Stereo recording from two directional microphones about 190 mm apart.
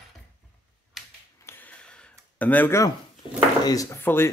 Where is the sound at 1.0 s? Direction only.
Centre (ahead or behind).